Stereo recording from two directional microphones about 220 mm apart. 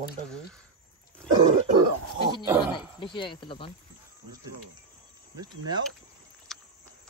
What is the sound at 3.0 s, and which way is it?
Speech, 20° left (ahead or behind).